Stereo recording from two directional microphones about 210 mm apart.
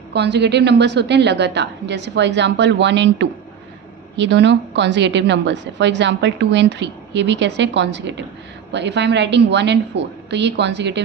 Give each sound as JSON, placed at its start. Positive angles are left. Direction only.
{"t": 0.1, "sound": "a woman's voice", "side_deg": -55}